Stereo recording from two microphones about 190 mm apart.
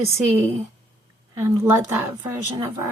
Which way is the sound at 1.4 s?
15° right (ahead or behind).